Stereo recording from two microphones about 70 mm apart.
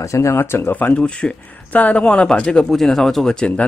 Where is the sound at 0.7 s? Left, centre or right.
Left.